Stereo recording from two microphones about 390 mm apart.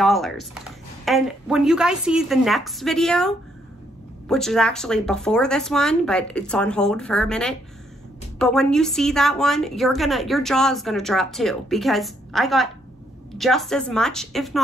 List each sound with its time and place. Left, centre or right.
0.0 s a woman's voice: centre